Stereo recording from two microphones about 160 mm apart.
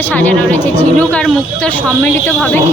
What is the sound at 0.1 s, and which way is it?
A child's voice, 10° left (ahead or behind).